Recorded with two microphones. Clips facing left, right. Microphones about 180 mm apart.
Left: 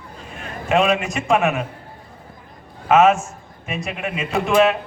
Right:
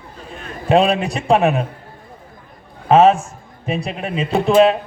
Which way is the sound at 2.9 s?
30° right (ahead or behind).